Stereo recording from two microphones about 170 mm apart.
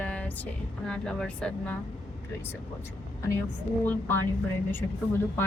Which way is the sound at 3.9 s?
10° left (ahead or behind).